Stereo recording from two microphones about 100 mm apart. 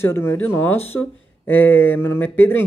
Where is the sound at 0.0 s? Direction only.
25° left (ahead or behind).